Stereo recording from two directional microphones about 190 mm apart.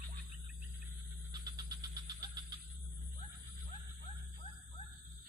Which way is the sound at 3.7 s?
35° left (ahead or behind).